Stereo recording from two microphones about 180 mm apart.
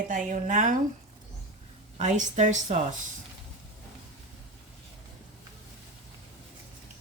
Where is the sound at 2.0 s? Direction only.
40° right (ahead or behind).